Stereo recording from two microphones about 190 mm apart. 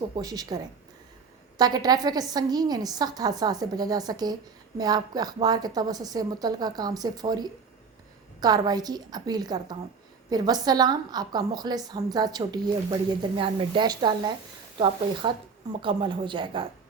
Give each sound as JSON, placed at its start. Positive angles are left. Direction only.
{"t": 0.2, "sound": "a woman's voice", "side_deg": -20}